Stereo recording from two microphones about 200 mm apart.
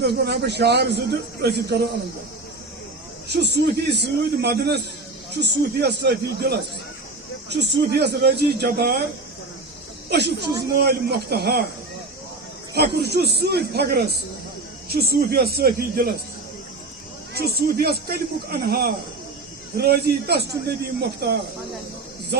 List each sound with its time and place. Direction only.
0.0 s a man's voice: 55° right (ahead or behind)
3.2 s a man's voice: 55° right (ahead or behind)
7.5 s a man's voice: 55° right (ahead or behind)
10.1 s speech: 55° right (ahead or behind)
12.7 s speech: 55° right (ahead or behind)
17.3 s speech: 50° right (ahead or behind)